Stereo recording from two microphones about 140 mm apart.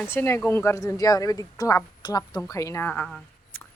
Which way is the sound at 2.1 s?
10° left (ahead or behind).